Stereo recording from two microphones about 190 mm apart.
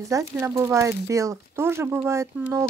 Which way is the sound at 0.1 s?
15° right (ahead or behind).